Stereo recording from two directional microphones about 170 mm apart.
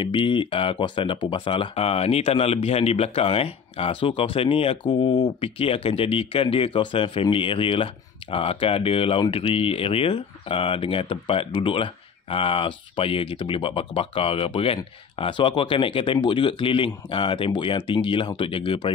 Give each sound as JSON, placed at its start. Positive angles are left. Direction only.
{"t": 0.0, "sound": "speech", "side_deg": 30}